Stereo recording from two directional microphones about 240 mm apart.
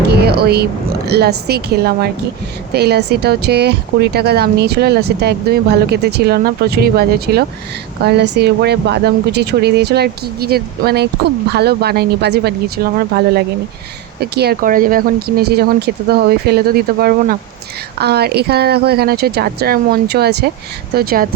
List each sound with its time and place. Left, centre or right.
0.1 s speech: right